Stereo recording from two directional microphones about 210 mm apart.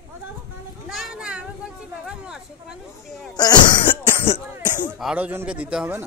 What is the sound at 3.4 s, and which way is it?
Throat clearing, 20° left (ahead or behind).